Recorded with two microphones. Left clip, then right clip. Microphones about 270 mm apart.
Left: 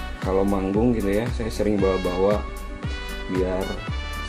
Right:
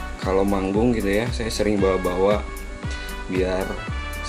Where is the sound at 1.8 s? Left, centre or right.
Centre.